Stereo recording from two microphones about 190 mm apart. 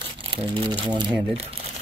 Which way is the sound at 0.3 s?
25° right (ahead or behind).